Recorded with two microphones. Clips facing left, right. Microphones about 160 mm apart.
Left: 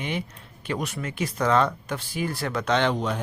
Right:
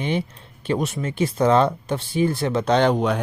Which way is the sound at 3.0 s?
65° right (ahead or behind).